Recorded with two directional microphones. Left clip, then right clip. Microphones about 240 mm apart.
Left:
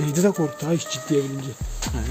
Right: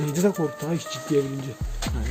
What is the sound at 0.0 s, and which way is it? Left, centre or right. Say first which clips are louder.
Speech: left 2 dB; centre.